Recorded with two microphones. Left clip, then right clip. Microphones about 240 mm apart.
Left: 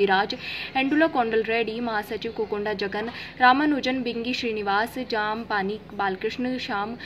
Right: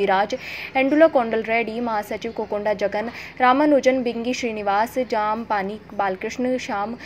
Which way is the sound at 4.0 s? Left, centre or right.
Right.